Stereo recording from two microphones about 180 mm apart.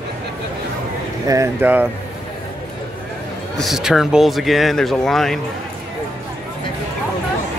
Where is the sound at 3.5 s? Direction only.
Centre (ahead or behind).